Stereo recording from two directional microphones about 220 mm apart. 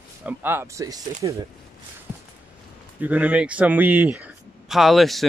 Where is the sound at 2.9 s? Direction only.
5° right (ahead or behind).